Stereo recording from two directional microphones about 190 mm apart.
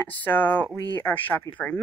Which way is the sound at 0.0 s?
10° left (ahead or behind).